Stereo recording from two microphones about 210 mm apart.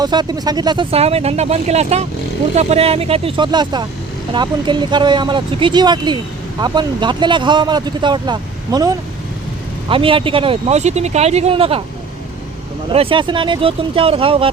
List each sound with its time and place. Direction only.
0.0 s speech: 20° right (ahead or behind)
12.9 s speech: 25° right (ahead or behind)